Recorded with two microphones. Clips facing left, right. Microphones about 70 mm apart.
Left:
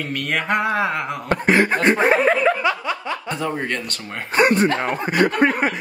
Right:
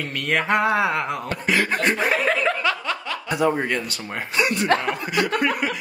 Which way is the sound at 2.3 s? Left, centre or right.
Centre.